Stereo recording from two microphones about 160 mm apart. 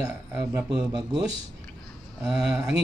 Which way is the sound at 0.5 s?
5° right (ahead or behind).